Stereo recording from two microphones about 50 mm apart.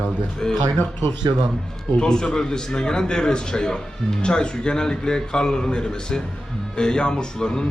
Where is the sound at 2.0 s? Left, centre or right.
Centre.